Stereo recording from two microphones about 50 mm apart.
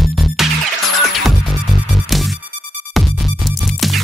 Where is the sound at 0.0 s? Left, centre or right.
Centre.